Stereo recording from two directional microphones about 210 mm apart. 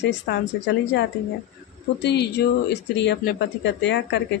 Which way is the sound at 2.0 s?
50° left (ahead or behind).